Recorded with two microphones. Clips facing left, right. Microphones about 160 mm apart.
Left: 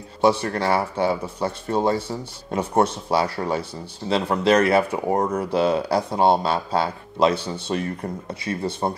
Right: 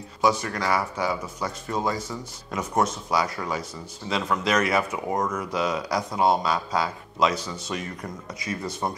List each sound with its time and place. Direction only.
0.2 s speech: 30° left (ahead or behind)